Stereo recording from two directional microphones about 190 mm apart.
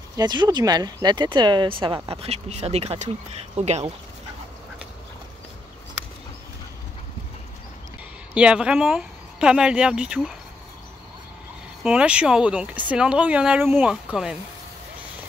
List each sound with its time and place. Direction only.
0.1 s speech: 20° right (ahead or behind)
8.4 s speech: 5° right (ahead or behind)
11.8 s speech: 5° right (ahead or behind)